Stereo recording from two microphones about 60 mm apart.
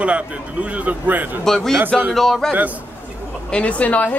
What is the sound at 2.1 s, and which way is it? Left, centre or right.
Speech, centre.